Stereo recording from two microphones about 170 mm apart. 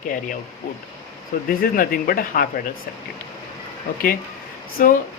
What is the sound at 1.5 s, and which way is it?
Speech, 60° left (ahead or behind).